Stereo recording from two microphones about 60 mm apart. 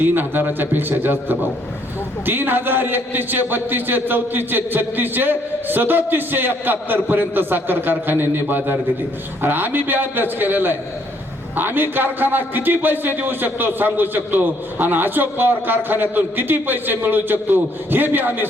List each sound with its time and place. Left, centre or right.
0.0 s a man's voice: right